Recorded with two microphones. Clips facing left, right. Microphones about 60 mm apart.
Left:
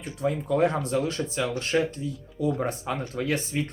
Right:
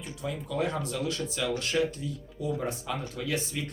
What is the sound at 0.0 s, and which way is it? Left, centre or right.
Speech, left.